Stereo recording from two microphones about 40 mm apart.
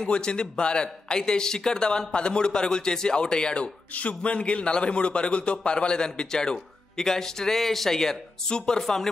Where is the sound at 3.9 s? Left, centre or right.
Left; by 9.1 s centre.